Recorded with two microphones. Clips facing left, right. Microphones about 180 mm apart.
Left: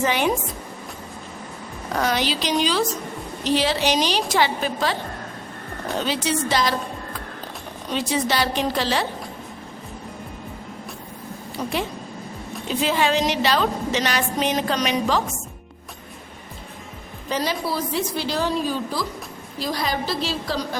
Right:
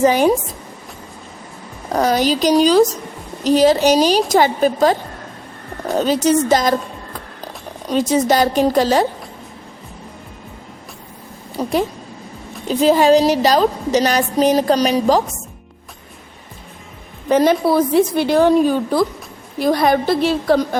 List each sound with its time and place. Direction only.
0.0 s a woman's voice: 40° right (ahead or behind)
1.9 s a woman's voice: 35° right (ahead or behind)
7.9 s a woman's voice: 45° right (ahead or behind)
11.5 s a woman's voice: 40° right (ahead or behind)
17.2 s a woman's voice: 50° right (ahead or behind)